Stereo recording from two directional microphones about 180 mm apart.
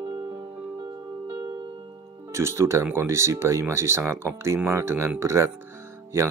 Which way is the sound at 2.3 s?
15° right (ahead or behind).